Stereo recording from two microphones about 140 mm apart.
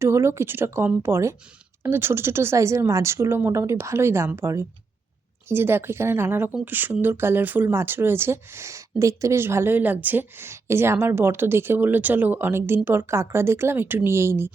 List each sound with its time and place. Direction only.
0.0 s speech: 20° right (ahead or behind)